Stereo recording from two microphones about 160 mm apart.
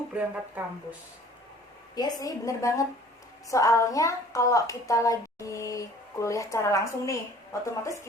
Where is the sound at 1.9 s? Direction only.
25° left (ahead or behind).